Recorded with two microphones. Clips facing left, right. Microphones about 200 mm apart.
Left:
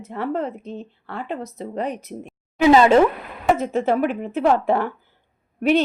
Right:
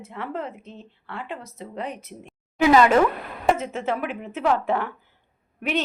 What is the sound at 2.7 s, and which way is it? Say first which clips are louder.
A woman's voice: left 4 dB; 25° left (ahead or behind).